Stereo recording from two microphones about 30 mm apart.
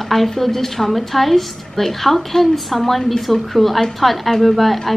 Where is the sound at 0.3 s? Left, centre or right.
Centre.